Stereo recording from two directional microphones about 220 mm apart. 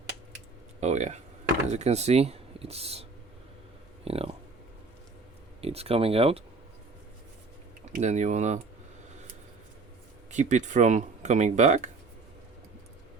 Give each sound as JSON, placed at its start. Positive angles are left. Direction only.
{"t": 0.8, "sound": "speech", "side_deg": -30}
{"t": 5.6, "sound": "speech", "side_deg": -25}
{"t": 7.9, "sound": "speech", "side_deg": -30}
{"t": 10.3, "sound": "speech", "side_deg": -35}